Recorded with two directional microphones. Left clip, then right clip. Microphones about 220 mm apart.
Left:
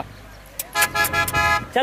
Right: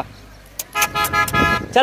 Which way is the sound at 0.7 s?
25° left (ahead or behind).